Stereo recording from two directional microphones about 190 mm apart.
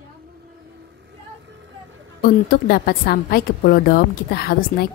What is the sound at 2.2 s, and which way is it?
A woman's voice, 50° left (ahead or behind).